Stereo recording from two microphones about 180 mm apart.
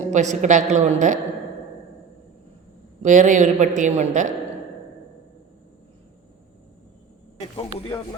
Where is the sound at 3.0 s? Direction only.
40° right (ahead or behind).